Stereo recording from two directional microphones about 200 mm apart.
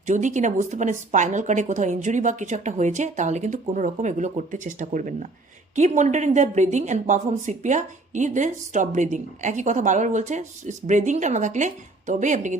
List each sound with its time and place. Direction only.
0.0 s a woman's voice: 40° right (ahead or behind)